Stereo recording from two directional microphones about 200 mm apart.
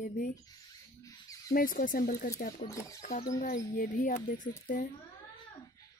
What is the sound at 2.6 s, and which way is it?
Speech, 35° left (ahead or behind).